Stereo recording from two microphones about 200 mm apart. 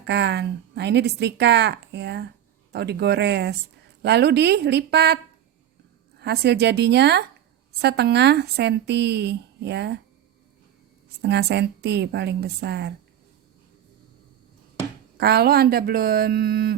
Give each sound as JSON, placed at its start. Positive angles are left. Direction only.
{"t": 0.0, "sound": "speech", "side_deg": -60}
{"t": 11.2, "sound": "speech", "side_deg": -55}
{"t": 15.2, "sound": "speech", "side_deg": -50}